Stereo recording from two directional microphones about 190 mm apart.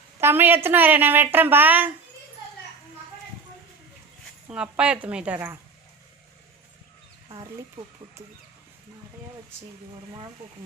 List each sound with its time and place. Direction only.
0.2 s a woman's voice: 10° right (ahead or behind)
4.4 s a woman's voice: 5° right (ahead or behind)
7.3 s speech: 25° right (ahead or behind)